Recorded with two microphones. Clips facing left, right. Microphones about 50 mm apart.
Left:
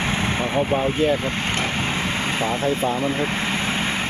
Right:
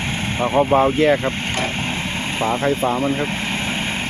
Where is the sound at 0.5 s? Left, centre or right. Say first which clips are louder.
Right 8 dB; right.